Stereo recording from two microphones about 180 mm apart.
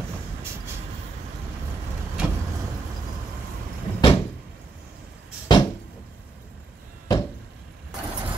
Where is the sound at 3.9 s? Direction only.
30° left (ahead or behind).